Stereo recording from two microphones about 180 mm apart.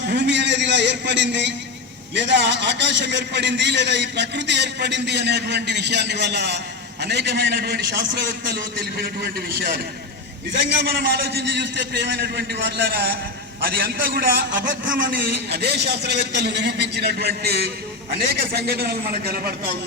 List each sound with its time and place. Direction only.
0.1 s a man's voice: 75° right (ahead or behind)
8.8 s a man's voice: 55° right (ahead or behind)
10.5 s a man's voice: 60° right (ahead or behind)